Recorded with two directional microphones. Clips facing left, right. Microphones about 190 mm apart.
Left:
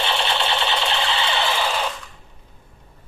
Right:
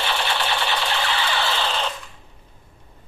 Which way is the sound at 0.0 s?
25° left (ahead or behind).